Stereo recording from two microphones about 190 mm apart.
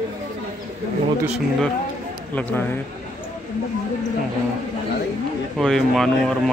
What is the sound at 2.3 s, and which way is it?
Speech, 10° left (ahead or behind).